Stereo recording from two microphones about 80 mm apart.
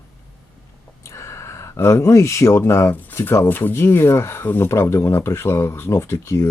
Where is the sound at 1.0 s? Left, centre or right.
Left.